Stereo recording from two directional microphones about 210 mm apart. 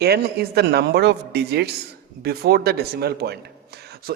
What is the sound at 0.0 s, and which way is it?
Speech, 50° right (ahead or behind).